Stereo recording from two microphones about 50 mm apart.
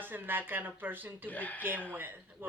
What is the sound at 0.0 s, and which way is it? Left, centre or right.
Speech, right.